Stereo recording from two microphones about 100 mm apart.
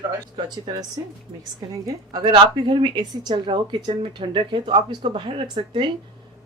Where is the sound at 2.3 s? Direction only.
55° right (ahead or behind).